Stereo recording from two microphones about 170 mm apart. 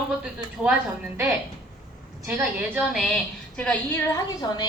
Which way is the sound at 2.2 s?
15° right (ahead or behind).